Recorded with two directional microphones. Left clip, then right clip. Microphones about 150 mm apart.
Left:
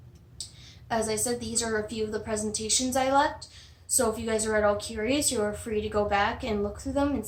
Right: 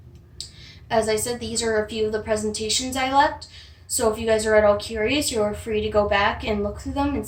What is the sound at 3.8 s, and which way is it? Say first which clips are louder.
A woman's voice: right 6 dB; 45° left (ahead or behind).